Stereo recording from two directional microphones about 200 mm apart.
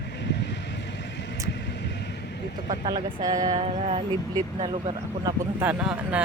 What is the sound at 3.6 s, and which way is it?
Speech, 30° right (ahead or behind).